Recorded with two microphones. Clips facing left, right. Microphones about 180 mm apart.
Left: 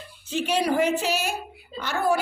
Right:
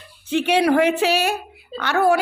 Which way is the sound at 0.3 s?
60° right (ahead or behind).